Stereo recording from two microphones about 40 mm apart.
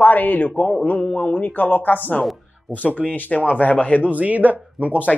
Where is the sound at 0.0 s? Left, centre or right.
Left.